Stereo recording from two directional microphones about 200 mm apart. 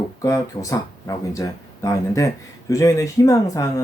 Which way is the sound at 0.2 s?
15° left (ahead or behind).